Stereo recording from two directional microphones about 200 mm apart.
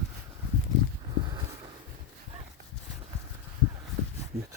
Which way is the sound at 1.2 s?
20° right (ahead or behind).